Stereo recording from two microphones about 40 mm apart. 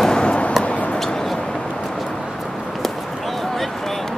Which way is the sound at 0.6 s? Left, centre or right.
Left.